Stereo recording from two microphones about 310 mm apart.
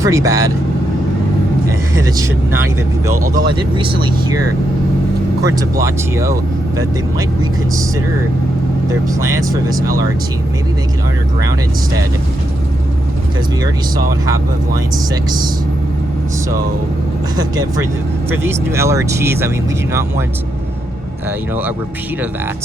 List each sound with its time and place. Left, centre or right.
0.0 s speech: centre
1.6 s speech: centre
5.5 s speech: centre
8.9 s speech: centre
15.1 s speech: centre
17.3 s speech: centre